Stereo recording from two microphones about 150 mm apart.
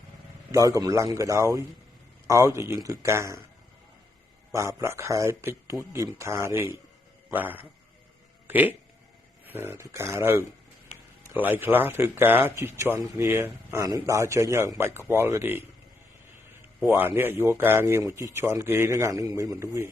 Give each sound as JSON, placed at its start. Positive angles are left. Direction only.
{"t": 0.5, "sound": "speech", "side_deg": -20}
{"t": 4.5, "sound": "a man's voice", "side_deg": -20}
{"t": 16.8, "sound": "a man's voice", "side_deg": -15}